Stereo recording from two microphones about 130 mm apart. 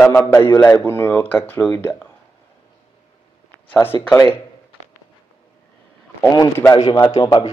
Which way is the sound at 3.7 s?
15° left (ahead or behind).